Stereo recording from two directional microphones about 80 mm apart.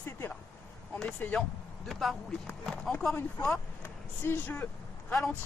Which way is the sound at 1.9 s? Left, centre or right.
Centre.